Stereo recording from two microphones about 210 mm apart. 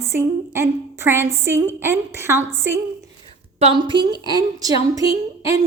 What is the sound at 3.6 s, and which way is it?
A woman's voice, 25° right (ahead or behind).